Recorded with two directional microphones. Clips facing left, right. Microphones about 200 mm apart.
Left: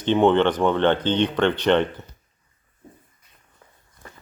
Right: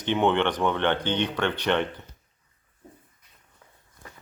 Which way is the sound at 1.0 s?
10° right (ahead or behind).